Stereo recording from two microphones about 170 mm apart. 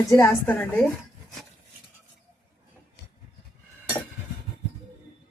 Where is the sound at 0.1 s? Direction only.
15° left (ahead or behind).